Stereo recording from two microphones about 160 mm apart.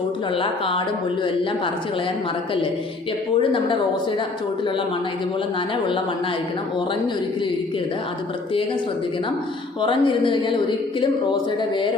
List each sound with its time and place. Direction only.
0.3 s a woman's voice: 35° left (ahead or behind)
9.8 s a woman's voice: 30° left (ahead or behind)